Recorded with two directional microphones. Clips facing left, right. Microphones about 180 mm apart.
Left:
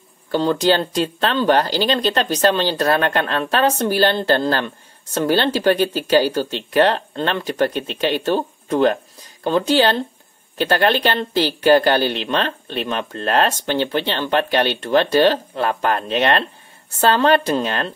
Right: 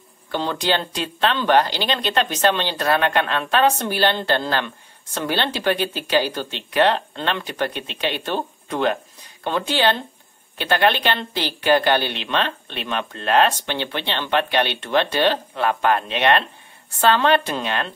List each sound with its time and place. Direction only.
0.3 s speech: 40° left (ahead or behind)